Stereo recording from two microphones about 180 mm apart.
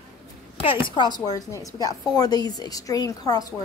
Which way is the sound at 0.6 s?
25° left (ahead or behind).